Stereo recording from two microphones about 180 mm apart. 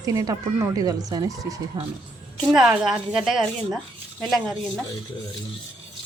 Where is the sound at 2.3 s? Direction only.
5° right (ahead or behind).